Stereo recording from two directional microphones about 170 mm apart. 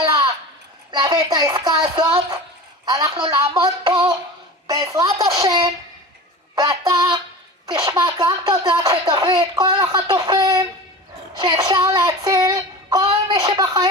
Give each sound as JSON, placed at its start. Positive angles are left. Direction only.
{"t": 0.9, "sound": "speech", "side_deg": -25}
{"t": 6.5, "sound": "music", "side_deg": -25}
{"t": 7.6, "sound": "speech", "side_deg": -25}
{"t": 11.3, "sound": "child singing", "side_deg": -25}
{"t": 13.0, "sound": "a sound", "side_deg": -25}